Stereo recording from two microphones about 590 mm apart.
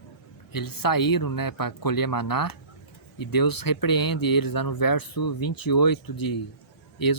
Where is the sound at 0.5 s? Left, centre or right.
Left.